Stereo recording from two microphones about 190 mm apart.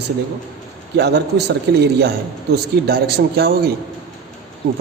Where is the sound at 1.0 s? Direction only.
60° right (ahead or behind).